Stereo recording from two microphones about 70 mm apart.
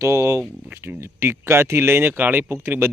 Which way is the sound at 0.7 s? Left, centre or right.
Right.